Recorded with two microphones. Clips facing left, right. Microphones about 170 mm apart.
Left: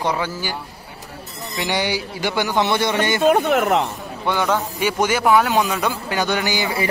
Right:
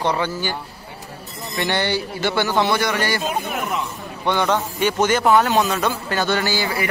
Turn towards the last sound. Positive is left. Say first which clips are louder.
# even
turn(degrees=20)  # may be behind; listen again after turning